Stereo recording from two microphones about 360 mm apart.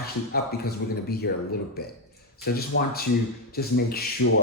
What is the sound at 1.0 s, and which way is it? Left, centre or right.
Speech, left.